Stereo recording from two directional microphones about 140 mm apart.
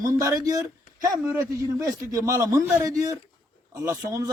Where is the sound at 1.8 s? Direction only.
25° right (ahead or behind).